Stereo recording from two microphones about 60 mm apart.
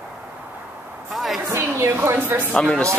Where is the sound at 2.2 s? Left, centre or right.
Right.